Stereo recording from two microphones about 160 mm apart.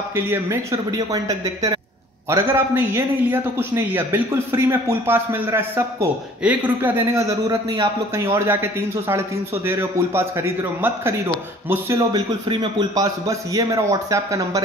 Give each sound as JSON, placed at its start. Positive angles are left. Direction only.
{"t": 0.1, "sound": "a man's voice", "side_deg": -15}